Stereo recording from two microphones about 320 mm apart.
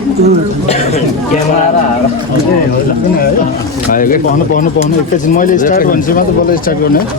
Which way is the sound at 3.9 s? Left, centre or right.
Left.